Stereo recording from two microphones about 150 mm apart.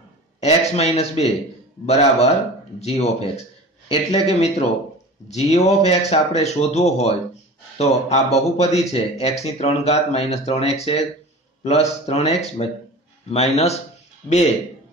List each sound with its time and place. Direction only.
0.4 s speech: 45° left (ahead or behind)